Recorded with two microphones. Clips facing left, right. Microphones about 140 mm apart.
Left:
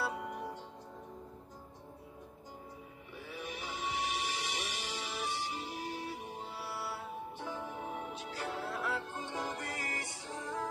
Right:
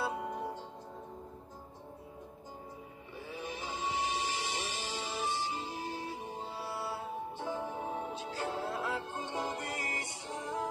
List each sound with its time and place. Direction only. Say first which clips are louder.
0.0 s music: right 2 dB; 25° right (ahead or behind)
3.2 s music: right 2 dB; 25° right (ahead or behind)